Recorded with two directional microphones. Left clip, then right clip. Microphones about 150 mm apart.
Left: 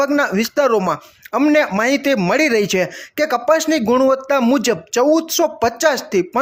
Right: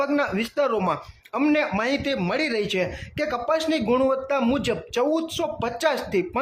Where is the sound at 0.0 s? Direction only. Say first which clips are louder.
Left 7 dB; 35° left (ahead or behind).